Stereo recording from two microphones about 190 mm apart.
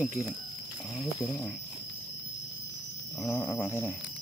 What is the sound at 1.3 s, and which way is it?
Speech, 15° left (ahead or behind).